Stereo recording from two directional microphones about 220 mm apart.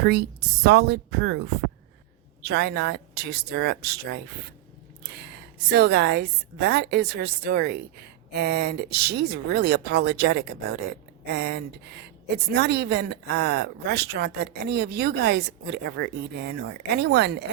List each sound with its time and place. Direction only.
0.0 s a woman's voice: 50° right (ahead or behind)
2.4 s a woman's voice: 50° right (ahead or behind)